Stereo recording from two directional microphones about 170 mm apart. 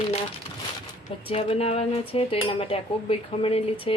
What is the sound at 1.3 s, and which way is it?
Speech, 35° left (ahead or behind).